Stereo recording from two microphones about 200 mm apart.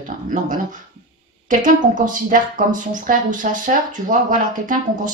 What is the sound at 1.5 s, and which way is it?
A woman's voice, 40° right (ahead or behind).